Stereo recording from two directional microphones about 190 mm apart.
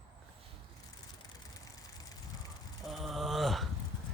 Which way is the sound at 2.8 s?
Centre (ahead or behind).